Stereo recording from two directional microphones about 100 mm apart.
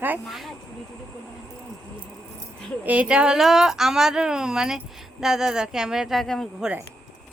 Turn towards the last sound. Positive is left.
turn(degrees=5)  # may be behind; listen again after turning